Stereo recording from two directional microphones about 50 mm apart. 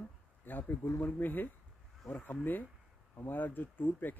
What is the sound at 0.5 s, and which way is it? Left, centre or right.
Speech, left.